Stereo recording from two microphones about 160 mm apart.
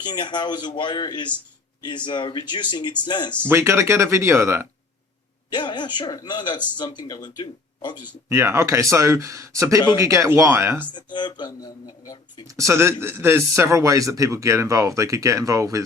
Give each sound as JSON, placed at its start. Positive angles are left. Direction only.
{"t": 0.0, "sound": "speech", "side_deg": 30}
{"t": 3.4, "sound": "speech", "side_deg": -15}
{"t": 5.5, "sound": "speech", "side_deg": 30}
{"t": 8.0, "sound": "speech", "side_deg": -15}
{"t": 10.9, "sound": "speech", "side_deg": 30}
{"t": 12.5, "sound": "speech", "side_deg": -20}